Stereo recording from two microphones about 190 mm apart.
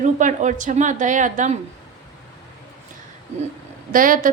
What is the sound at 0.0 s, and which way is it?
A woman's voice, 40° right (ahead or behind).